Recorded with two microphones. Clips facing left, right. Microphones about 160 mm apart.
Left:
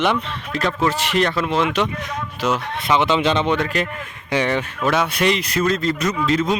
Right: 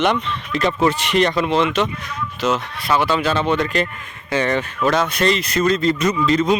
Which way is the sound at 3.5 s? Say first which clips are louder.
Right 2 dB; 10° left (ahead or behind).